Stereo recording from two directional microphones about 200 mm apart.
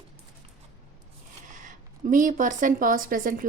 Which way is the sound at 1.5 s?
40° right (ahead or behind).